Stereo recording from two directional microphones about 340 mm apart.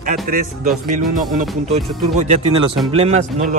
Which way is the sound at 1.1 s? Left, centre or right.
Centre.